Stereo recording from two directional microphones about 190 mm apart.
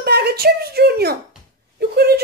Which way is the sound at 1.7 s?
55° right (ahead or behind).